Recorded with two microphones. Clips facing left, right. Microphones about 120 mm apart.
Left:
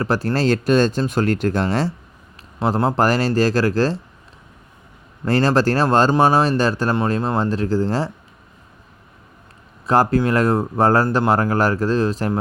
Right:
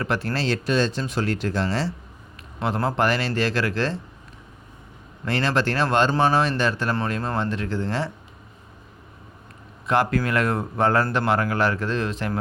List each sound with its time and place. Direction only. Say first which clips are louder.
0.0 s speech: left 5 dB; 35° left (ahead or behind)
0.3 s speech: left 7 dB; 45° left (ahead or behind)
2.6 s speech: left 5 dB; 35° left (ahead or behind)
5.2 s speech: left 6 dB; 40° left (ahead or behind)
9.8 s speech: left 5 dB; 35° left (ahead or behind)